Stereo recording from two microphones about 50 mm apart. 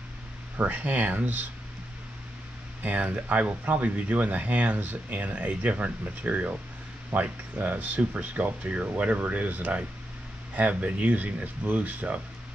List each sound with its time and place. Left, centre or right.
0.6 s speech: right
2.8 s speech: right